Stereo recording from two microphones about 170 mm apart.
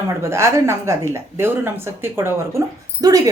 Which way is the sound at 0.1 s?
15° right (ahead or behind).